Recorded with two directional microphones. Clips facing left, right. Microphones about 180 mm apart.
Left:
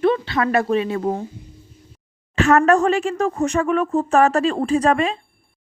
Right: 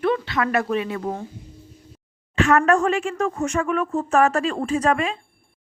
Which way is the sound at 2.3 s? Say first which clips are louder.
Left 3 dB; 40° left (ahead or behind).